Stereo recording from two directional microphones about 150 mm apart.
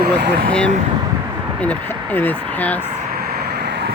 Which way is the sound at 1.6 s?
10° left (ahead or behind).